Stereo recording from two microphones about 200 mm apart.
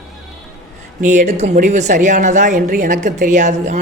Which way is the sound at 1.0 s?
40° right (ahead or behind).